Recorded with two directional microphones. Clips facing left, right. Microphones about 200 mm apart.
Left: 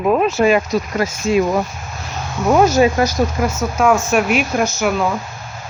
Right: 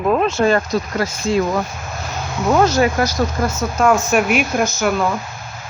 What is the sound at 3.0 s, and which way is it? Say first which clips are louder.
Speech: left 2 dB; 20° left (ahead or behind).